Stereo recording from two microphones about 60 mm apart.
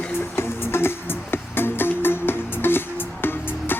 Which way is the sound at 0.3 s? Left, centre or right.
Left.